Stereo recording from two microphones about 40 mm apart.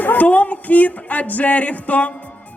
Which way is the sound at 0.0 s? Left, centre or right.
Left.